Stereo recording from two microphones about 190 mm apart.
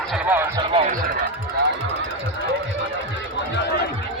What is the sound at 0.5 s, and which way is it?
Music, 25° right (ahead or behind).